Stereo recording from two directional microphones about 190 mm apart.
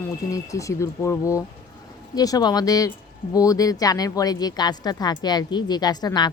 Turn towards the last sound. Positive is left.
turn(degrees=20)  # may be behind; listen again after turning